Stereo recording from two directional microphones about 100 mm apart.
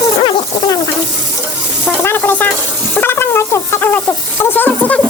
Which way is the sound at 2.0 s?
25° left (ahead or behind).